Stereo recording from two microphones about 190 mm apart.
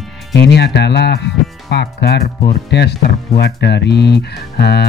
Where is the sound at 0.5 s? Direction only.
65° left (ahead or behind).